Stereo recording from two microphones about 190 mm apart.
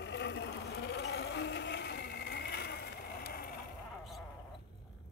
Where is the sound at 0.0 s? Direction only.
65° left (ahead or behind).